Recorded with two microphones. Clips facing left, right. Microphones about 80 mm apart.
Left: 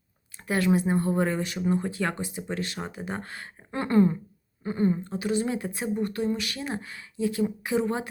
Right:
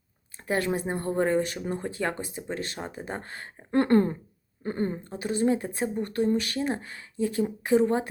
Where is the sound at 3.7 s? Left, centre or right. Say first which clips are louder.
Right 1 dB; right.